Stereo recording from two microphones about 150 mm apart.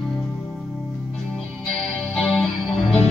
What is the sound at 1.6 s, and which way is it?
Music, 5° left (ahead or behind).